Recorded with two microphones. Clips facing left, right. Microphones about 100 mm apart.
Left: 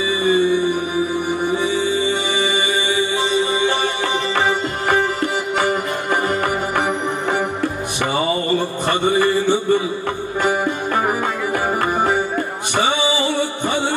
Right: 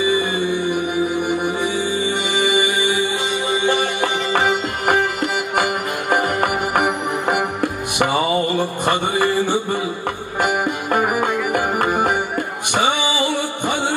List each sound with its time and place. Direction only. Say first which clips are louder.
0.0 s music: left 2 dB; 20° right (ahead or behind)
6.0 s music: right 2 dB; 60° right (ahead or behind)
8.8 s music: left 2 dB; 15° right (ahead or behind)
13.2 s music: left 1 dB; 15° right (ahead or behind)